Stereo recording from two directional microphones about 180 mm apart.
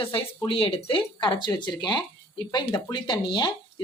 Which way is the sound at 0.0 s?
30° left (ahead or behind).